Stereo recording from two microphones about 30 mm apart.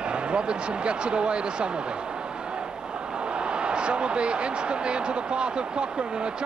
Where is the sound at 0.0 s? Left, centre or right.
Right.